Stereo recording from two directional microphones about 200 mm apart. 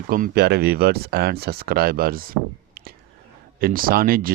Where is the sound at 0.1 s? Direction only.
50° right (ahead or behind).